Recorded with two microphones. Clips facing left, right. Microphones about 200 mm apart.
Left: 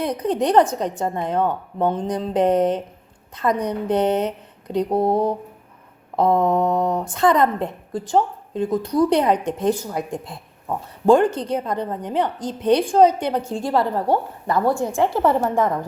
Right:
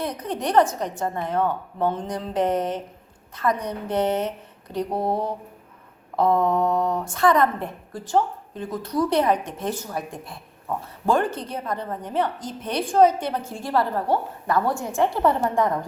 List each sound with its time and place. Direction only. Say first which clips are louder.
0.0 s a woman's voice: left 6 dB; 15° left (ahead or behind)
4.7 s mantra: left 6 dB; 20° left (ahead or behind)
6.1 s a woman's voice: left 2 dB; 20° left (ahead or behind); by 15.7 s 5° left (ahead or behind)